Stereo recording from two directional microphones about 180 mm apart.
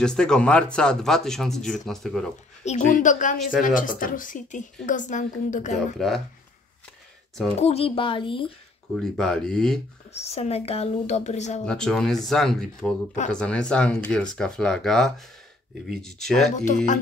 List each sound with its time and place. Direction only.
0.0 s speech: 5° left (ahead or behind)
2.6 s a woman's voice: 40° left (ahead or behind)
5.9 s speech: centre (ahead or behind)
7.6 s speech: 35° left (ahead or behind)
8.9 s speech: centre (ahead or behind)
10.1 s a woman's voice: 35° left (ahead or behind)
11.6 s speech: 5° left (ahead or behind)
16.5 s a woman's voice: 45° left (ahead or behind)